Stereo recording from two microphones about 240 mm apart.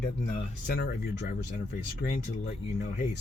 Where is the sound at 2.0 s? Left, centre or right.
Left.